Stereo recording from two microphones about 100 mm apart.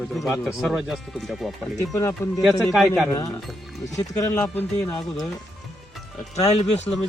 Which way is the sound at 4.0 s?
35° left (ahead or behind).